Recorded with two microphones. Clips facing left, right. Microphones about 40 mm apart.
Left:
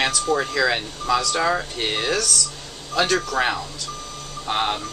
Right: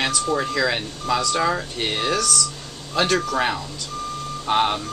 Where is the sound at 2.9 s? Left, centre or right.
Centre.